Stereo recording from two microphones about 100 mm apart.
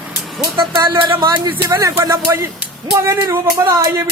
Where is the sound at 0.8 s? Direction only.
40° right (ahead or behind).